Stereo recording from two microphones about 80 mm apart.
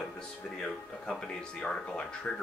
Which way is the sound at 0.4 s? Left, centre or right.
Centre.